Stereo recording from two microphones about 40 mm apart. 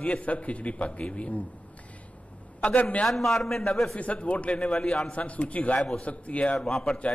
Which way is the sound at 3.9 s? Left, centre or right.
Left.